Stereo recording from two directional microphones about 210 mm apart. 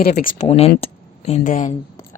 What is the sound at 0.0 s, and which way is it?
Speech, 45° left (ahead or behind).